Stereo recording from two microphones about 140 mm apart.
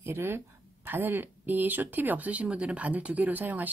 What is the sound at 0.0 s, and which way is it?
Speech, 15° right (ahead or behind).